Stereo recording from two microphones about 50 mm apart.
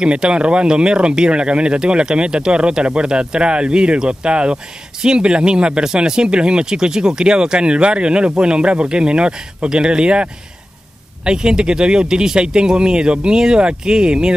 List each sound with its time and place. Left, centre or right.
0.0 s speech: centre